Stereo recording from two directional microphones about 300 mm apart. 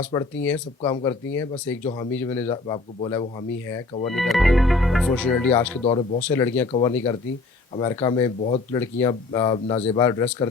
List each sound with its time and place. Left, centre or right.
0.0 s speech: centre
4.1 s speech: centre
5.8 s speech: centre
6.2 s speech: centre